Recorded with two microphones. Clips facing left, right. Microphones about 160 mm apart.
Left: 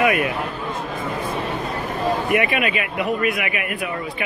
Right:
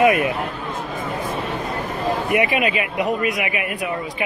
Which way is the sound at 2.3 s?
20° right (ahead or behind).